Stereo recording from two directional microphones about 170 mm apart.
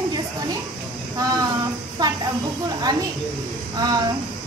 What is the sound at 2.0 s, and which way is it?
Speech, 25° right (ahead or behind).